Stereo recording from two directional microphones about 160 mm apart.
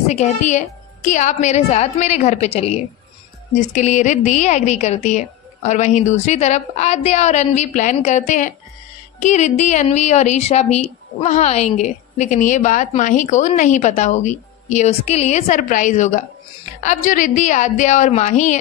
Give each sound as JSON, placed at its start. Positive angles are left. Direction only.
{"t": 0.1, "sound": "a woman's voice", "side_deg": 45}